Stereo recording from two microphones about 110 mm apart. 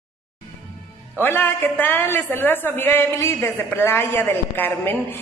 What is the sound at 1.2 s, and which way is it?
A woman's voice, 15° left (ahead or behind).